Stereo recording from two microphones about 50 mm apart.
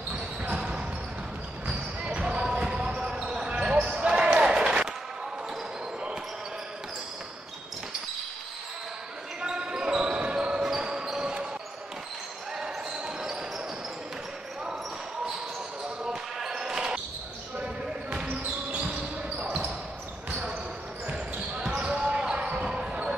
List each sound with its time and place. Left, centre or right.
0.6 s basketball bounce: centre
4.4 s run: centre
9.4 s basketball bounce: centre
12.5 s basketball bounce: centre
16.0 s basketball bounce: centre
18.1 s basketball bounce: right
21.1 s basketball bounce: centre